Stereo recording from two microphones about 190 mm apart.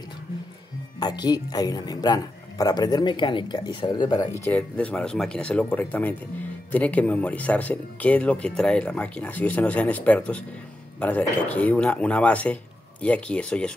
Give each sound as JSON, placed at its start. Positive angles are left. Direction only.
{"t": 0.9, "sound": "speech", "side_deg": 20}
{"t": 4.5, "sound": "speech", "side_deg": 5}